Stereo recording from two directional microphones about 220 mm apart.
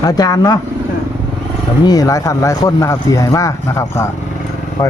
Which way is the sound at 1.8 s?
15° left (ahead or behind).